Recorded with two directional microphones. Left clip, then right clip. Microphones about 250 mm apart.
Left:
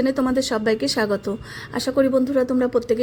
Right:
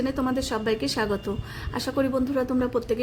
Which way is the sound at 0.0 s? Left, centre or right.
Left.